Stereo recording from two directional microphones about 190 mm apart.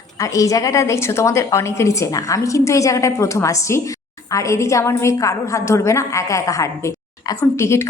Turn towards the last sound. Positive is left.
turn(degrees=15)  # may be behind; listen again after turning